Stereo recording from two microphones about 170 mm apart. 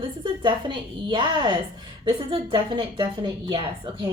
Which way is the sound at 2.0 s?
30° right (ahead or behind).